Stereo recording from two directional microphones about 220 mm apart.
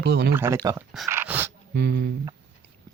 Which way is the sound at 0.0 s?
45° right (ahead or behind).